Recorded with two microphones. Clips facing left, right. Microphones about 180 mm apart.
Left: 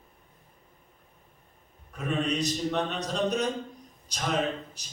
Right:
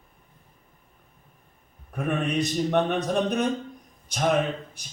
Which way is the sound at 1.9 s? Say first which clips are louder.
Right 3 dB; 55° right (ahead or behind).